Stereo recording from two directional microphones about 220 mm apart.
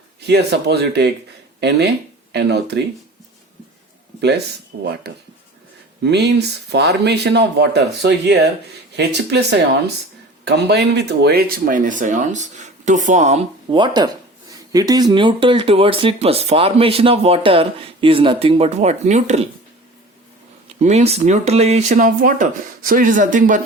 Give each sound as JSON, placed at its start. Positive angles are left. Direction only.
{"t": 0.3, "sound": "speech", "side_deg": -50}
{"t": 2.3, "sound": "speech", "side_deg": -50}
{"t": 4.7, "sound": "speech", "side_deg": -55}
{"t": 6.0, "sound": "speech", "side_deg": -50}
{"t": 20.8, "sound": "speech", "side_deg": -30}